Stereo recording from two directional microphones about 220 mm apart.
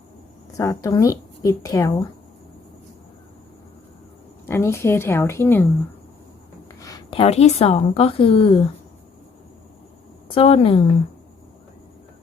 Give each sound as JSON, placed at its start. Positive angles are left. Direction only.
{"t": 0.5, "sound": "speech", "side_deg": 15}
{"t": 4.4, "sound": "speech", "side_deg": 10}
{"t": 6.7, "sound": "speech", "side_deg": 15}
{"t": 10.2, "sound": "speech", "side_deg": 25}